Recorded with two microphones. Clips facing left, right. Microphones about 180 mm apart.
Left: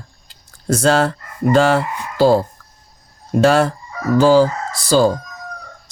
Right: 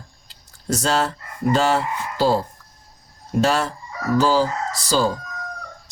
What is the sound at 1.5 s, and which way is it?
Fowl, 55° left (ahead or behind).